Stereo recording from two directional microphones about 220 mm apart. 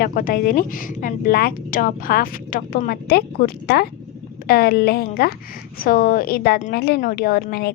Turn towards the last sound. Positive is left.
turn(degrees=45)  # may be behind; listen again after turning